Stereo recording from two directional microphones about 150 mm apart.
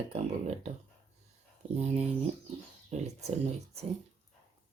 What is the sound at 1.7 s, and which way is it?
Speech, 45° right (ahead or behind).